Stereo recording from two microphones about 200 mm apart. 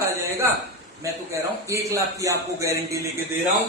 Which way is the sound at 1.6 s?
15° right (ahead or behind).